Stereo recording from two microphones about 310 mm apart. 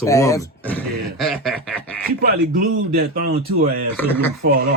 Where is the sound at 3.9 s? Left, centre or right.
Centre.